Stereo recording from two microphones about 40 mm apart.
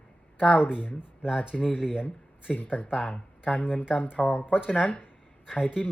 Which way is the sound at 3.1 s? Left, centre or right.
Left.